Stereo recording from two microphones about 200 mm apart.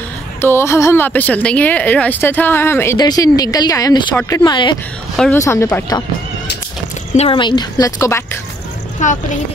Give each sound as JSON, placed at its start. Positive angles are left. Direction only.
{"t": 0.4, "sound": "speech", "side_deg": 10}
{"t": 5.1, "sound": "a woman's voice", "side_deg": 5}
{"t": 5.4, "sound": "speech", "side_deg": 15}
{"t": 7.2, "sound": "speech", "side_deg": 25}
{"t": 9.0, "sound": "speech", "side_deg": 40}